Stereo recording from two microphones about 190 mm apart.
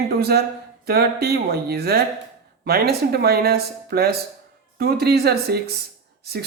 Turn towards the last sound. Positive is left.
turn(degrees=-55)  # may be behind; listen again after turning